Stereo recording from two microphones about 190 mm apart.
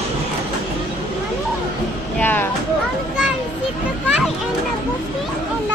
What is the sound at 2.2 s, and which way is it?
Speech, 10° left (ahead or behind).